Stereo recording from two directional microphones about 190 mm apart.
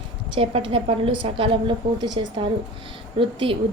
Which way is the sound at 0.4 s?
30° right (ahead or behind).